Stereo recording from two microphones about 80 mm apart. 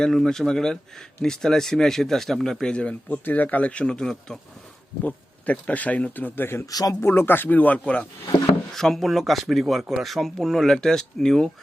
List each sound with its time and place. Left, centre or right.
0.0 s speech: centre
5.0 s speech: centre
6.7 s speech: left
7.0 s speech: left
8.7 s speech: centre